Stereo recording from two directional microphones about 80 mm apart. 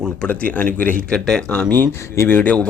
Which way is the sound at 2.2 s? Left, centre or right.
Left.